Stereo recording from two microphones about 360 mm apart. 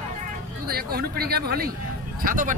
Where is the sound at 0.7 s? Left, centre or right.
Right.